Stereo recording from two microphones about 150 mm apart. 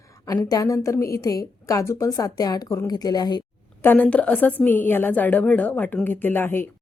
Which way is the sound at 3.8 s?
10° left (ahead or behind).